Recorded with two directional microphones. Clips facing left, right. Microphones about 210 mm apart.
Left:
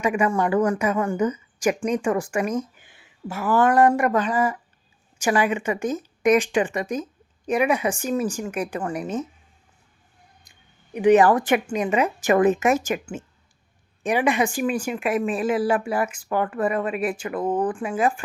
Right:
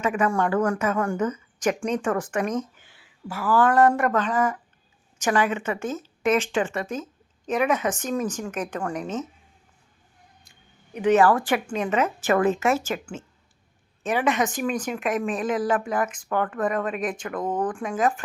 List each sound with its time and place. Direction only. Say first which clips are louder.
0.0 s a woman's voice: left 2 dB; 10° left (ahead or behind)
10.9 s a woman's voice: left 3 dB; 15° left (ahead or behind)